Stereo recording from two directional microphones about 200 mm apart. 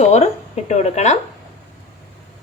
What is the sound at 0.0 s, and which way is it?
Speech, 35° left (ahead or behind).